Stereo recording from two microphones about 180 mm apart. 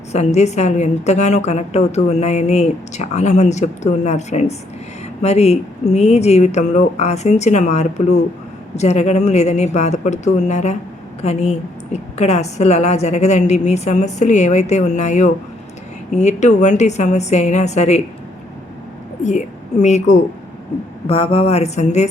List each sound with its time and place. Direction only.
0.1 s a woman's voice: 40° left (ahead or behind)
19.2 s a woman's voice: 40° left (ahead or behind)